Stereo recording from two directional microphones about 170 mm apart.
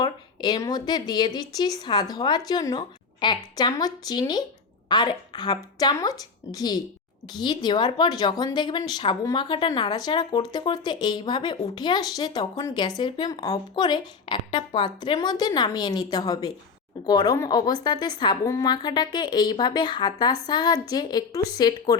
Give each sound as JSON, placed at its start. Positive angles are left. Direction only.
{"t": 0.0, "sound": "speech", "side_deg": 25}